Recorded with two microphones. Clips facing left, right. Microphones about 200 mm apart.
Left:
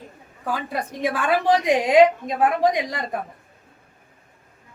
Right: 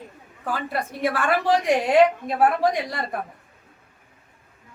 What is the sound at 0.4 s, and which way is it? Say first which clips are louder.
A woman's voice: even; 15° left (ahead or behind).